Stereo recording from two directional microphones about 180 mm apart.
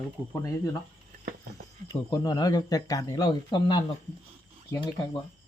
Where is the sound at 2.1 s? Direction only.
25° left (ahead or behind).